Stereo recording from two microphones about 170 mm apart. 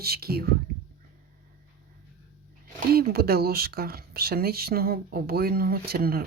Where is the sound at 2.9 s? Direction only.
65° right (ahead or behind).